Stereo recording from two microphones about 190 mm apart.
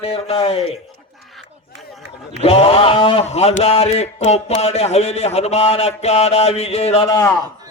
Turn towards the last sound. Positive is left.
turn(degrees=15)  # may be behind; listen again after turning